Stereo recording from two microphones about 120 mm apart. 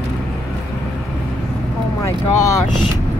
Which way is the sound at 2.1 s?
30° left (ahead or behind).